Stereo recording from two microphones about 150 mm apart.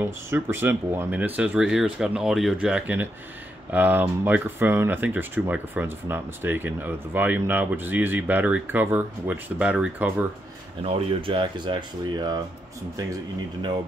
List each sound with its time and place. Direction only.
0.0 s speech: 15° right (ahead or behind)
10.8 s speech: 40° right (ahead or behind)